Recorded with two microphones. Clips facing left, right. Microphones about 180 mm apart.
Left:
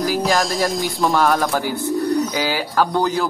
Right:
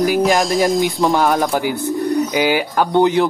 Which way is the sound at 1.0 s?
20° right (ahead or behind).